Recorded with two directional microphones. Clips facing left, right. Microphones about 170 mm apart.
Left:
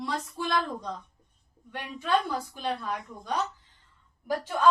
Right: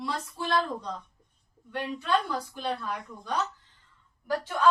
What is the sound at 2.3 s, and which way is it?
Speech, 10° left (ahead or behind).